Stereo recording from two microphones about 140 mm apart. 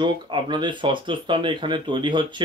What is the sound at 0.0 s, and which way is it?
Speech, 35° right (ahead or behind).